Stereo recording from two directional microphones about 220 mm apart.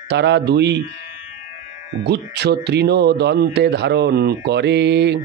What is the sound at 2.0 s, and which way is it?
Speech, 50° right (ahead or behind).